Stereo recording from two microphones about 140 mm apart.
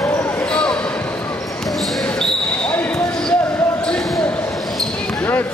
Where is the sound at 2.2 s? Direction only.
5° left (ahead or behind).